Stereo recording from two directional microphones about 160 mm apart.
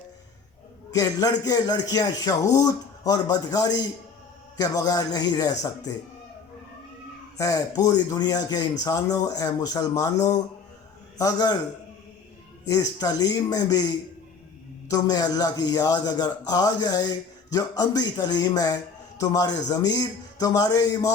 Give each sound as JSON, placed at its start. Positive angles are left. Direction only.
{"t": 0.9, "sound": "speech", "side_deg": 25}
{"t": 7.3, "sound": "speech", "side_deg": 20}
{"t": 12.6, "sound": "speech", "side_deg": 20}
{"t": 14.8, "sound": "speech", "side_deg": 25}